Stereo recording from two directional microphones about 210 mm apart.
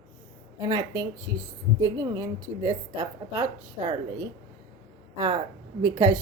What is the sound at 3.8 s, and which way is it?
Speech, 25° right (ahead or behind).